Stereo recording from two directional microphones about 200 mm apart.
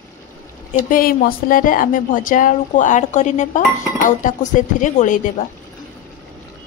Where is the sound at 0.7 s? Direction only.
45° left (ahead or behind).